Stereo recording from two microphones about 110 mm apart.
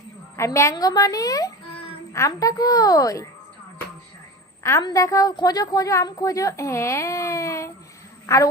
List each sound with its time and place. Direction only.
0.3 s a woman's voice: 25° left (ahead or behind)
1.7 s a sound: 55° left (ahead or behind)
2.1 s a woman's voice: 30° left (ahead or behind)
4.8 s a woman's voice: 35° left (ahead or behind)